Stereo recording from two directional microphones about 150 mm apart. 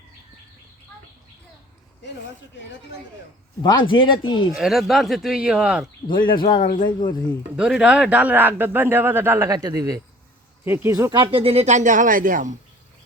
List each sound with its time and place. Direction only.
3.6 s speech: 30° left (ahead or behind)
4.5 s speech: centre (ahead or behind)
6.1 s speech: 30° left (ahead or behind)
7.5 s speech: 5° right (ahead or behind)
11.1 s speech: 35° right (ahead or behind); by 12.5 s 60° right (ahead or behind)